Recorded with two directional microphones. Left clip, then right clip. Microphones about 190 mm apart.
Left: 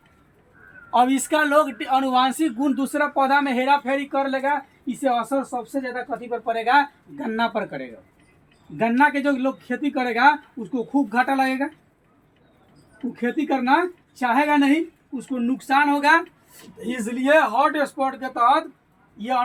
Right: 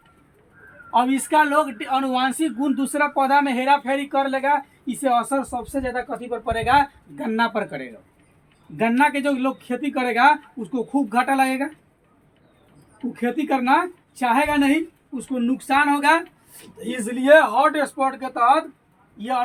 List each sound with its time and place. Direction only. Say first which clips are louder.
0.9 s speech: left 1 dB; 25° left (ahead or behind); by 11.7 s 35° right (ahead or behind)
13.1 s a man's voice: right 1 dB; 35° right (ahead or behind); by 19.4 s 20° right (ahead or behind)